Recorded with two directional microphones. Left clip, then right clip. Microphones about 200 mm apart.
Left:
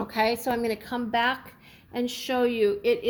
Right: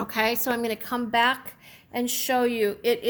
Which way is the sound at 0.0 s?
50° right (ahead or behind).